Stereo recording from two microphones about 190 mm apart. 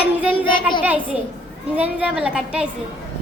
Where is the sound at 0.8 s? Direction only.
10° right (ahead or behind).